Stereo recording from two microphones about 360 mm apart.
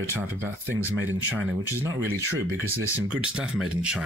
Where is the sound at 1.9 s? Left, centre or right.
Right.